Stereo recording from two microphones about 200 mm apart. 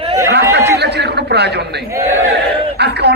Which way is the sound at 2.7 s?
55° right (ahead or behind).